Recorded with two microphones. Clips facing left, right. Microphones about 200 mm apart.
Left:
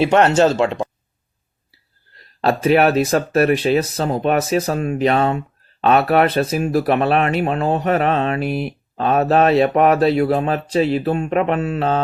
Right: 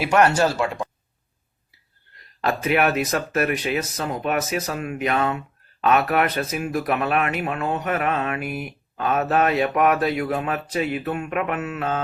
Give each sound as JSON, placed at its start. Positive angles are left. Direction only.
{"t": 0.0, "sound": "speech", "side_deg": 25}